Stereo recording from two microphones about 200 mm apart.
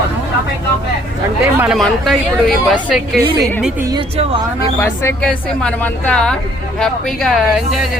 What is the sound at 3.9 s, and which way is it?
Speech, 25° right (ahead or behind).